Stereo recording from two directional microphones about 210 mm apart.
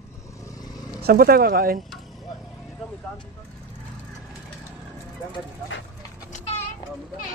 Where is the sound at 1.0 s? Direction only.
45° right (ahead or behind).